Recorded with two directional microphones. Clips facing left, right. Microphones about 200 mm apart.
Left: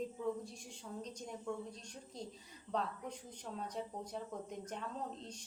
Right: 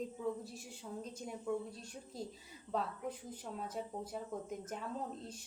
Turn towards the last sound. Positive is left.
turn(degrees=-5)  # may be behind; listen again after turning